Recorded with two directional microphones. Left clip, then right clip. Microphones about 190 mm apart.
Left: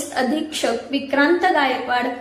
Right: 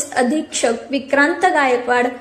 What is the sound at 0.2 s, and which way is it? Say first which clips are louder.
A woman's voice: right 4 dB; 40° right (ahead or behind).